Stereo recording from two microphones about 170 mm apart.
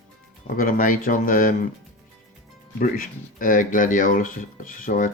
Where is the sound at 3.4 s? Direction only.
50° left (ahead or behind).